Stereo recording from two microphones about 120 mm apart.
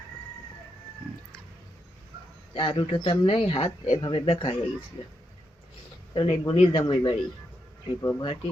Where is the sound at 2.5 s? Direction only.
45° left (ahead or behind).